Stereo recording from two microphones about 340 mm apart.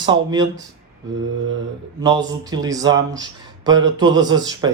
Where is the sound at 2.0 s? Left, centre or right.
Centre.